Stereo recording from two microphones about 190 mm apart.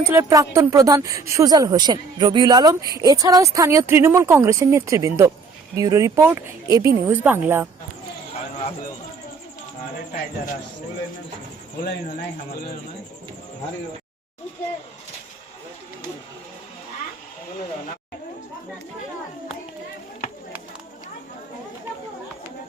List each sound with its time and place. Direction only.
0.0 s speech: 15° right (ahead or behind)